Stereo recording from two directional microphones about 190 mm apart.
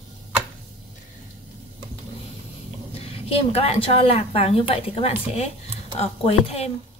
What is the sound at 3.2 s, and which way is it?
Speech, 30° left (ahead or behind).